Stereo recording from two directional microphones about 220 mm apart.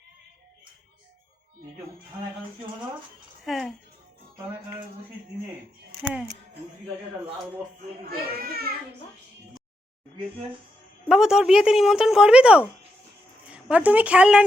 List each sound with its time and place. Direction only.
3.4 s a woman's voice: centre (ahead or behind)
8.4 s a child's voice: 45° right (ahead or behind)
11.1 s a woman's voice: centre (ahead or behind)